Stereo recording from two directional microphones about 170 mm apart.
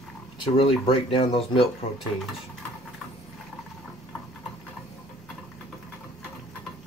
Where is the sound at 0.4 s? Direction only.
35° left (ahead or behind).